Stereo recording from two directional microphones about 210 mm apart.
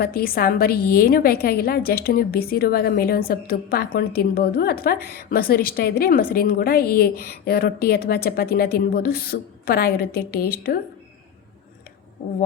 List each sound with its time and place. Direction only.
0.0 s a woman's voice: 45° left (ahead or behind)